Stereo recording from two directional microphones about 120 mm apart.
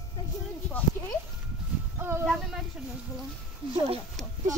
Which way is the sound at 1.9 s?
20° right (ahead or behind).